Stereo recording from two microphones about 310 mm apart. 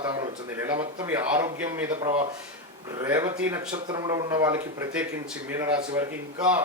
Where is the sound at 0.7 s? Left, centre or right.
Centre.